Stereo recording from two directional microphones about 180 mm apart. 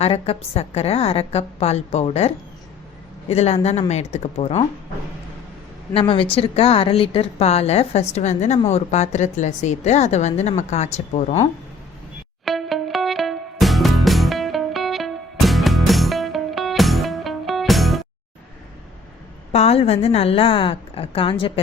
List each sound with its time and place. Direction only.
0.0 s a woman's voice: 35° left (ahead or behind)
5.9 s a woman's voice: 30° left (ahead or behind)
12.5 s music: centre (ahead or behind)
19.5 s a woman's voice: 35° left (ahead or behind)